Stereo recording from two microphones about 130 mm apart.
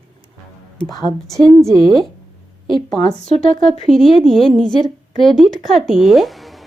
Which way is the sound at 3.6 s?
Centre (ahead or behind).